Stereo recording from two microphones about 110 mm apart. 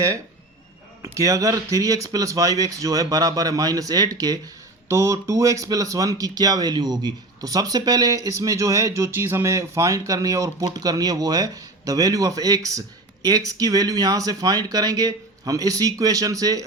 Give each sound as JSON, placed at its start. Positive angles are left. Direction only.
{"t": 1.0, "sound": "speech", "side_deg": -30}